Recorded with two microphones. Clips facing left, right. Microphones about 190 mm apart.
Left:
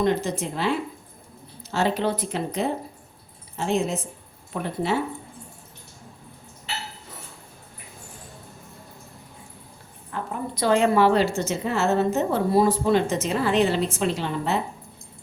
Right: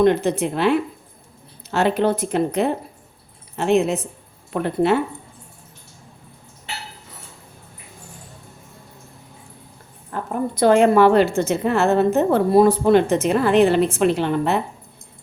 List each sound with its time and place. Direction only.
0.0 s a woman's voice: 60° right (ahead or behind)
10.1 s a woman's voice: 45° right (ahead or behind)